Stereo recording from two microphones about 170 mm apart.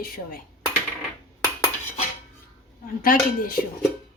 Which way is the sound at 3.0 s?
55° left (ahead or behind).